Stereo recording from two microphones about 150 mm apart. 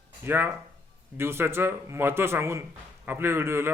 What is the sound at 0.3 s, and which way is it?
A man's voice, 15° right (ahead or behind).